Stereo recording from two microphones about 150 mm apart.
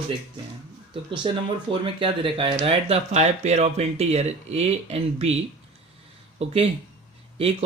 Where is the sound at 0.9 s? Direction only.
35° right (ahead or behind).